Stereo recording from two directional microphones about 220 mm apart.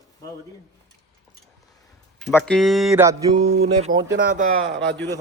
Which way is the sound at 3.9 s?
40° right (ahead or behind).